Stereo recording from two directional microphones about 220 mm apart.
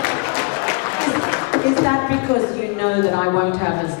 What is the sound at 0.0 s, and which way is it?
Applause, 15° left (ahead or behind).